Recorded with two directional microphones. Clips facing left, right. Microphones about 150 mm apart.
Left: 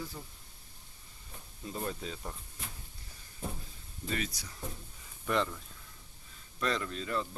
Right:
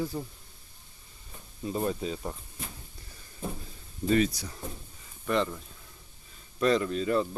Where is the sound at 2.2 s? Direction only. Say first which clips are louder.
Right 7 dB; 30° right (ahead or behind).